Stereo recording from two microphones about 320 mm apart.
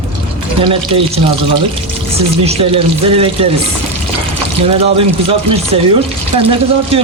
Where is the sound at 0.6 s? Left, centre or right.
Centre.